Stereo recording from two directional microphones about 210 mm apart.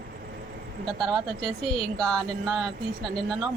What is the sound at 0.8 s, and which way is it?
A woman's voice, centre (ahead or behind).